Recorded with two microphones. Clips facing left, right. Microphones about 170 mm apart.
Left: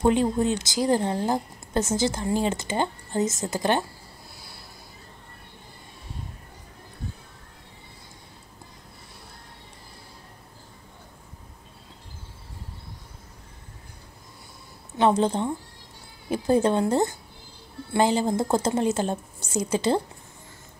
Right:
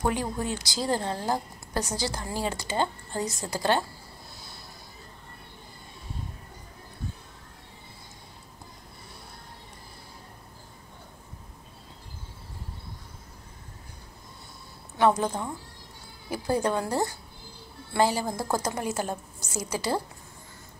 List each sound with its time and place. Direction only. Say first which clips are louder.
0.0 s a woman's voice: left 7 dB; 25° left (ahead or behind)
15.0 s a woman's voice: left 3 dB; 25° left (ahead or behind)